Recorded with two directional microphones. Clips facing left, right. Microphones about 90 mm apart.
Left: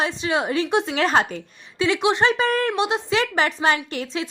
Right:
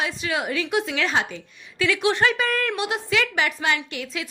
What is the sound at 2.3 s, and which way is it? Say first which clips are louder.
A woman's voice: left 4 dB; 35° left (ahead or behind).